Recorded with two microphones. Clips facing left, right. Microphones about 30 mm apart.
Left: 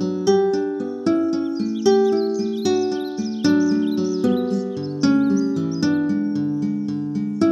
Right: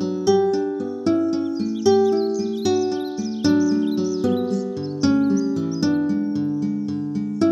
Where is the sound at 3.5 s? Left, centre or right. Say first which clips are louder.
Even; left.